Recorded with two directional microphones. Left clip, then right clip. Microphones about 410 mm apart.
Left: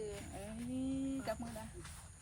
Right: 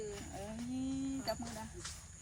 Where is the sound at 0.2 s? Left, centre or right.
Centre.